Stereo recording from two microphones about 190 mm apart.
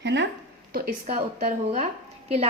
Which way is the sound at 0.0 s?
70° right (ahead or behind).